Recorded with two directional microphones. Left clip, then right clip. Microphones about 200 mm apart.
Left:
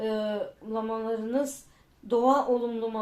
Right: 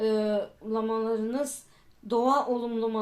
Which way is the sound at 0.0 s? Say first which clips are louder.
Right 3 dB; 45° right (ahead or behind).